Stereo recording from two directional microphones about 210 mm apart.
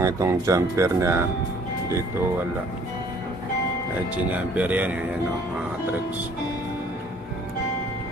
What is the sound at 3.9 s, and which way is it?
Speech, 5° right (ahead or behind).